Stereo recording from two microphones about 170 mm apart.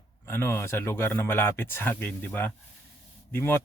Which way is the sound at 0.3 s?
15° left (ahead or behind).